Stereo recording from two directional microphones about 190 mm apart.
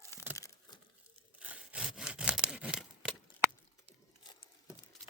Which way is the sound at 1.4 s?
5° right (ahead or behind).